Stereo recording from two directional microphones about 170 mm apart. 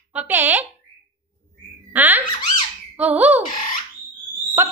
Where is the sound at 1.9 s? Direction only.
10° right (ahead or behind).